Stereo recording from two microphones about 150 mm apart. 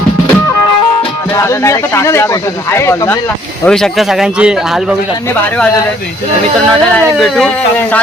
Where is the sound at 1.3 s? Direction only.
20° left (ahead or behind).